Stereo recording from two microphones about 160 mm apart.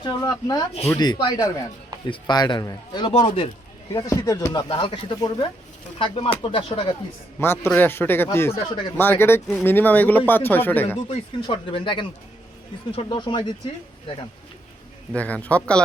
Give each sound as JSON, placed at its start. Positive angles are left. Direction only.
{"t": 0.0, "sound": "speech", "side_deg": 25}
{"t": 3.9, "sound": "speech", "side_deg": 20}
{"t": 7.3, "sound": "speech", "side_deg": 15}
{"t": 8.5, "sound": "speech", "side_deg": 30}
{"t": 9.0, "sound": "speech", "side_deg": 15}
{"t": 11.1, "sound": "speech", "side_deg": 30}
{"t": 15.1, "sound": "speech", "side_deg": 10}